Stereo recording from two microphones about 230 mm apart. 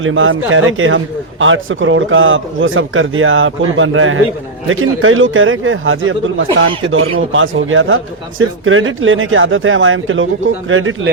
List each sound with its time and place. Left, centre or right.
0.0 s speech: right